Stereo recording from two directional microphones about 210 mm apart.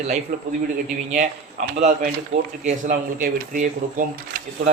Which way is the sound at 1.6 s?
40° right (ahead or behind).